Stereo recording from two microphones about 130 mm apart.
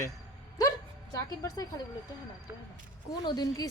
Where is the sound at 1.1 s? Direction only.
25° left (ahead or behind).